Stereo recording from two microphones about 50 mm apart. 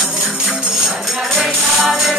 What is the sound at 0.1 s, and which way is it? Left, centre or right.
Music, centre.